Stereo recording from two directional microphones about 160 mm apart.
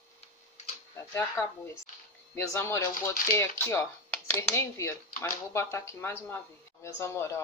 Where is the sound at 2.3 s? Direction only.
15° left (ahead or behind).